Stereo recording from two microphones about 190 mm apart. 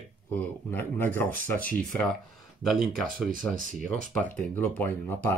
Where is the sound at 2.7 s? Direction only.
45° right (ahead or behind).